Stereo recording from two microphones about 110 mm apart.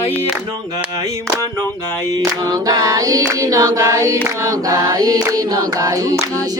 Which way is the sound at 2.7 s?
35° right (ahead or behind).